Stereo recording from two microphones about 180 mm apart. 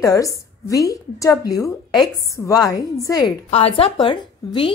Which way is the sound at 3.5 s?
30° left (ahead or behind).